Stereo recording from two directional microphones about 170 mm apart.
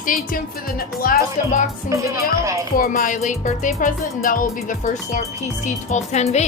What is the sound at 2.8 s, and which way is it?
Speech, 50° left (ahead or behind).